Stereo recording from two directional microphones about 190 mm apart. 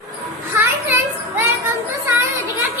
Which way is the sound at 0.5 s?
15° right (ahead or behind).